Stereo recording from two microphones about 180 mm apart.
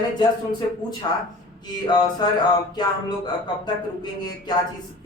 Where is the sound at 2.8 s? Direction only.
25° left (ahead or behind).